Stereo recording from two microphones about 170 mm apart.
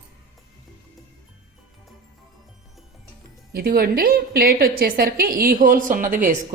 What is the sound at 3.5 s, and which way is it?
A woman's voice, 65° right (ahead or behind).